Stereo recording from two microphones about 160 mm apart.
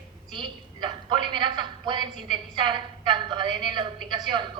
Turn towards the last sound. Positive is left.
turn(degrees=-30)  # may be behind; listen again after turning